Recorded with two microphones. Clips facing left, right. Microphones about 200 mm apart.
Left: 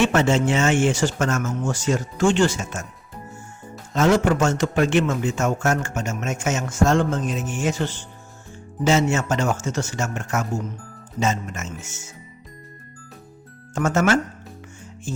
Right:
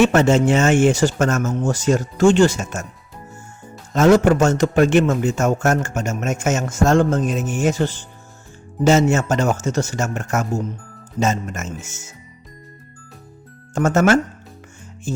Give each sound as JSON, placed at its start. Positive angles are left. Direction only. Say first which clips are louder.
{"t": 0.0, "sound": "speech", "louder": "right 4 dB", "side_deg": -40}
{"t": 3.9, "sound": "speech", "louder": "right 5 dB", "side_deg": -40}
{"t": 13.7, "sound": "speech", "louder": "right 4 dB", "side_deg": -40}